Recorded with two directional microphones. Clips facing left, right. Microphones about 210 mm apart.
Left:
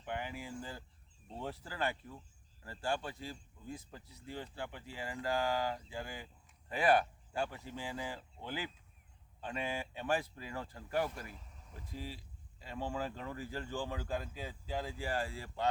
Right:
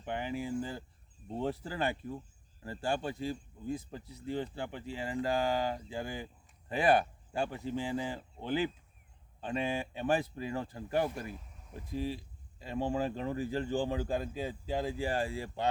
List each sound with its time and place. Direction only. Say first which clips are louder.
0.0 s speech: right 6 dB; 25° right (ahead or behind)